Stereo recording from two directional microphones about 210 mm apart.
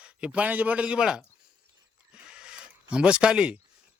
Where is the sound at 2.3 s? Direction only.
5° right (ahead or behind).